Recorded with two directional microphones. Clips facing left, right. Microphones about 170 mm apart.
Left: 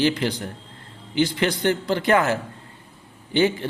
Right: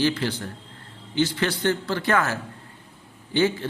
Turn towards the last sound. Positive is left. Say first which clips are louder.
# left 2 dB
turn(degrees=15)  # may be behind; listen again after turning